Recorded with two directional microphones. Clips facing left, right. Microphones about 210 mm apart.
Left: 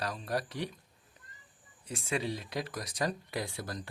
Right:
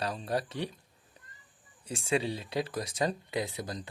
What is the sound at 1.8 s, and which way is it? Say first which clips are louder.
Speech: right 4 dB; 30° right (ahead or behind).